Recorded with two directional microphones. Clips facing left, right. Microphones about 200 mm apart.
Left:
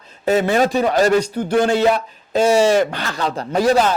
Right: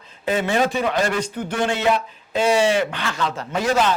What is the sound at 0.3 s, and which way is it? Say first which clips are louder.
Speech: left 4 dB; 40° left (ahead or behind).